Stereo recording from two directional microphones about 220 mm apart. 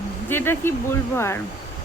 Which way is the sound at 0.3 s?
10° left (ahead or behind).